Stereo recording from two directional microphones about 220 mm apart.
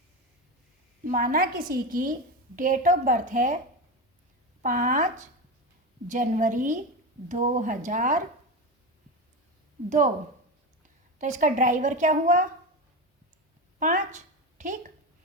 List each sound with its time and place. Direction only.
1.0 s a woman's voice: 40° right (ahead or behind)
4.6 s a woman's voice: 35° right (ahead or behind)
11.2 s a woman's voice: 35° right (ahead or behind)
13.7 s a woman's voice: 35° right (ahead or behind)